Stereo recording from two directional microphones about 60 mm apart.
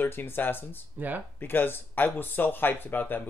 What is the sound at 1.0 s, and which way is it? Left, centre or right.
Speech, right.